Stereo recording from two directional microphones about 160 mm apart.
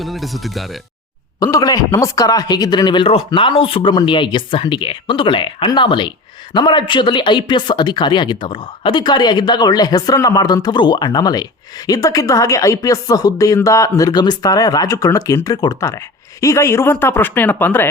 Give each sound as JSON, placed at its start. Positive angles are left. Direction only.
{"t": 0.0, "sound": "speech", "side_deg": 0}
{"t": 1.4, "sound": "speech", "side_deg": 20}